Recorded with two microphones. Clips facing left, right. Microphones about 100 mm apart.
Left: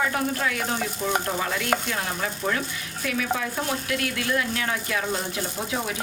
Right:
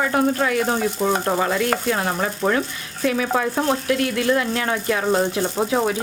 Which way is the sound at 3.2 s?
40° right (ahead or behind).